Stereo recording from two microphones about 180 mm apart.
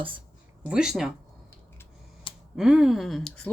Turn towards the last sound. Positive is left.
turn(degrees=0)  # may be behind; listen again after turning